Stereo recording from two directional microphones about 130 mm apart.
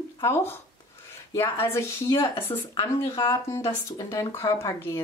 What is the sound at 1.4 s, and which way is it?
Speech, 20° left (ahead or behind).